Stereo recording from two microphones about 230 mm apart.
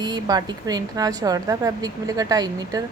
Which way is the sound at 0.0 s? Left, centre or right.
Centre.